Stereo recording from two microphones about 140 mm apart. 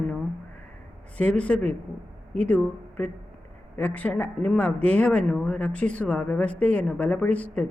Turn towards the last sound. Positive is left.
turn(degrees=10)  # may be behind; listen again after turning